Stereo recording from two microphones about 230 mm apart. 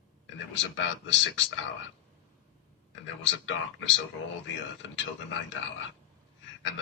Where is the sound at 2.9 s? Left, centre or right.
Left.